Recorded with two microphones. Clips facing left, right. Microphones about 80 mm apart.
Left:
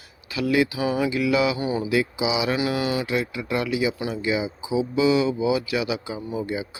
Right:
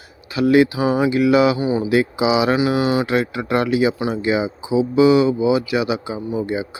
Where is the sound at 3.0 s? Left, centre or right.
Right.